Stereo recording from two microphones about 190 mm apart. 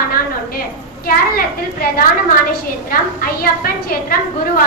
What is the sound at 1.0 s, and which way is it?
A woman's voice, 50° left (ahead or behind).